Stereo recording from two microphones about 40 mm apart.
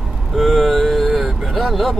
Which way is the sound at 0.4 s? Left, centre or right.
Centre.